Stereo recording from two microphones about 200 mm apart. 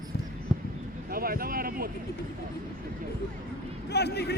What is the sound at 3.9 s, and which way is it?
Speech, 55° left (ahead or behind).